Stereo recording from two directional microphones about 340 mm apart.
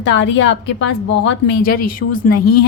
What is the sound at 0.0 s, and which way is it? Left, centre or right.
A woman's voice, left.